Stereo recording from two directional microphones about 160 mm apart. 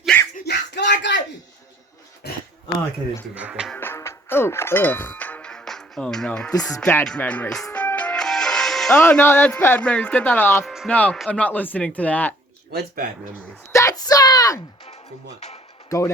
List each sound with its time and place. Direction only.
0.1 s dog: 5° left (ahead or behind)
0.4 s bellow: 90° left
2.2 s a sound: 90° left
3.3 s speech: 5° right (ahead or behind)
3.8 s music: 15° left (ahead or behind)
6.8 s speech: 5° left (ahead or behind)
10.7 s music: centre (ahead or behind)
10.9 s speech: 5° left (ahead or behind)
13.7 s a sound: 20° left (ahead or behind)
15.4 s music: 40° left (ahead or behind)
15.9 s speech: 20° left (ahead or behind)